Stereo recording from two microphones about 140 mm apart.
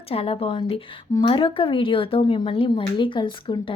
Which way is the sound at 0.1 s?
45° left (ahead or behind).